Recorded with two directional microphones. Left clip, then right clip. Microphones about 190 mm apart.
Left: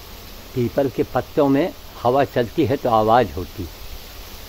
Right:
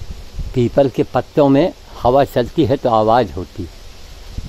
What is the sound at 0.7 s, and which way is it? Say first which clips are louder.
Speech: right 6 dB; 40° right (ahead or behind).